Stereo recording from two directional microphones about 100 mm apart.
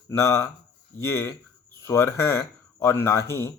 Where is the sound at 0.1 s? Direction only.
30° left (ahead or behind).